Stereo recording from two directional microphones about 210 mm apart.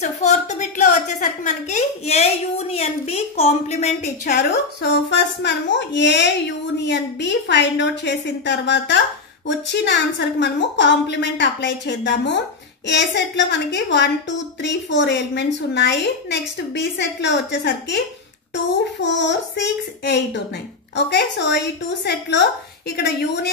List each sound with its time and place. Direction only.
0.0 s a woman's voice: 35° left (ahead or behind); by 23.5 s 50° left (ahead or behind)